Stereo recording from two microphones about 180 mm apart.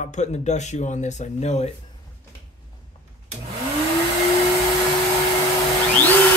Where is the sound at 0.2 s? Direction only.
40° left (ahead or behind).